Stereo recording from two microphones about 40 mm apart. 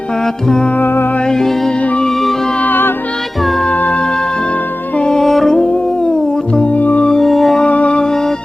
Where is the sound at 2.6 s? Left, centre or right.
Left.